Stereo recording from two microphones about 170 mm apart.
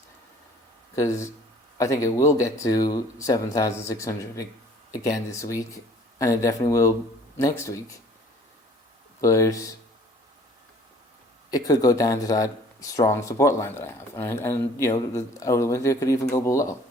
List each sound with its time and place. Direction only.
0.9 s speech: 15° left (ahead or behind)
9.2 s speech: 20° left (ahead or behind)
11.5 s speech: 20° left (ahead or behind)